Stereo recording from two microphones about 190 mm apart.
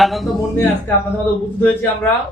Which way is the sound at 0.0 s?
Centre (ahead or behind).